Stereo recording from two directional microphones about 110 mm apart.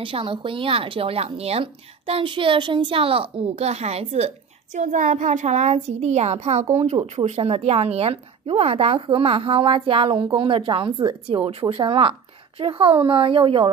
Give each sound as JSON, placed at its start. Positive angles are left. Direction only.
{"t": 0.0, "sound": "speech", "side_deg": -50}
{"t": 4.7, "sound": "a child's voice", "side_deg": -90}